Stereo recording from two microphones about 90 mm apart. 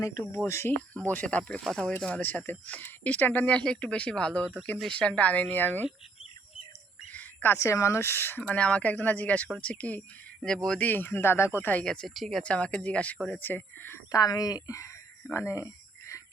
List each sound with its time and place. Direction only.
0.0 s speech: 45° left (ahead or behind)
0.4 s speech: 30° left (ahead or behind)
1.1 s speech: 10° left (ahead or behind)
7.1 s speech: 20° left (ahead or behind)
8.4 s speech: 15° left (ahead or behind)
10.8 s speech: 20° left (ahead or behind)
11.9 s speech: 5° left (ahead or behind)
12.4 s speech: 10° left (ahead or behind)
13.4 s speech: 20° left (ahead or behind)
14.1 s speech: 45° left (ahead or behind)
15.3 s a sound: 30° left (ahead or behind)